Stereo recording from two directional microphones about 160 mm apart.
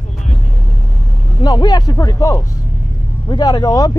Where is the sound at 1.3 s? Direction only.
25° left (ahead or behind).